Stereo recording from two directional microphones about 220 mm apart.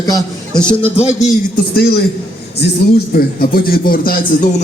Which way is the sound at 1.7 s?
45° left (ahead or behind).